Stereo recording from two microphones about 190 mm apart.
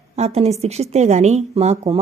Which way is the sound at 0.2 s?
35° right (ahead or behind).